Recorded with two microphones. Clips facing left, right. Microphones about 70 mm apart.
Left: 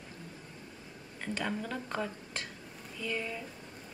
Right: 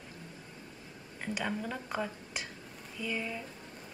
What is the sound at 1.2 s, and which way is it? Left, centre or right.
Speech, centre.